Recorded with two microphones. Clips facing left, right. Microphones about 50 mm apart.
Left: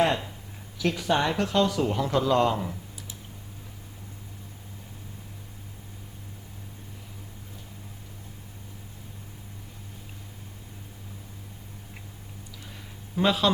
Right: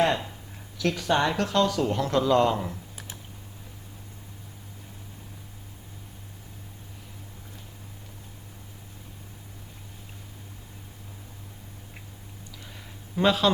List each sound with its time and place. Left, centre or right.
0.8 s speech: centre
13.1 s speech: centre